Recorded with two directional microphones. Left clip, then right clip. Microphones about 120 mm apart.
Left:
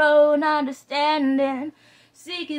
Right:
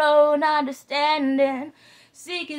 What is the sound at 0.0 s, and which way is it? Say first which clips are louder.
Female singing: left 1 dB; 25° right (ahead or behind).